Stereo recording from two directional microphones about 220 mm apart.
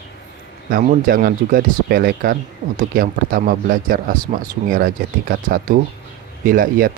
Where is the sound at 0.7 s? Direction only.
40° right (ahead or behind).